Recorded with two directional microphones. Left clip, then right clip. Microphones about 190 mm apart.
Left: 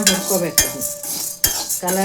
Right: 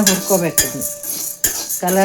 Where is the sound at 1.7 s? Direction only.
45° right (ahead or behind).